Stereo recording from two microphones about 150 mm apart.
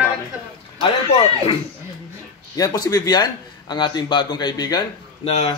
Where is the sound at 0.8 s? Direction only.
40° left (ahead or behind).